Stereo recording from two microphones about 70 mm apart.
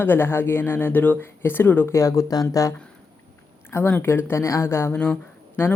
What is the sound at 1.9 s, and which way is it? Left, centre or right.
Speech, left.